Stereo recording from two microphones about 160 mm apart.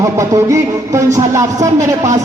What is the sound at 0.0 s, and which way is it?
Speech, 20° right (ahead or behind).